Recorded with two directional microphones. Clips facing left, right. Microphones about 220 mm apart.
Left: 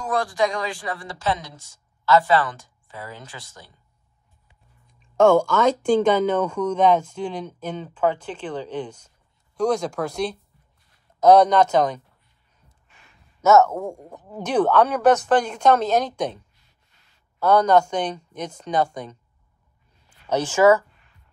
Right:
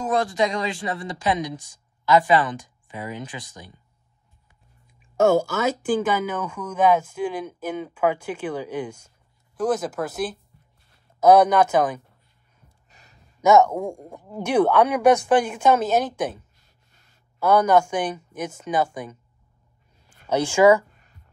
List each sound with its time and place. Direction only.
0.0 s speech: 20° right (ahead or behind)
5.1 s speech: 5° right (ahead or behind)
12.6 s a sound: 40° right (ahead or behind)
13.4 s speech: 15° right (ahead or behind)
17.4 s speech: 10° right (ahead or behind)
20.2 s speech: 10° right (ahead or behind)